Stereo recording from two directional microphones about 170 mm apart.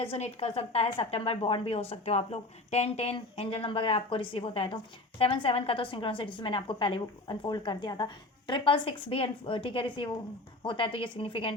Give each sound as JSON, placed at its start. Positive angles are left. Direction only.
{"t": 0.0, "sound": "a woman's voice", "side_deg": 35}